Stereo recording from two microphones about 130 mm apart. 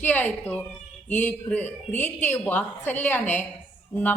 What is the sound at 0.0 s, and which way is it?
Speech, 15° left (ahead or behind).